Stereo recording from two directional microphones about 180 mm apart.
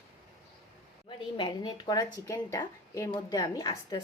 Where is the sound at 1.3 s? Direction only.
25° left (ahead or behind).